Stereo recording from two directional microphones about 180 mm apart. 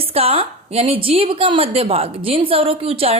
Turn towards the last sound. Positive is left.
turn(degrees=-35)  # may be behind; listen again after turning